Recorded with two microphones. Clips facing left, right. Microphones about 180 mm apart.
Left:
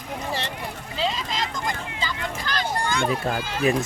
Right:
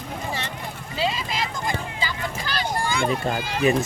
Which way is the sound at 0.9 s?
10° right (ahead or behind).